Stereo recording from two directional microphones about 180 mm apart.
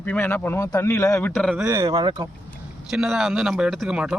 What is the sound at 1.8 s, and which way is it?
Speech, 25° right (ahead or behind).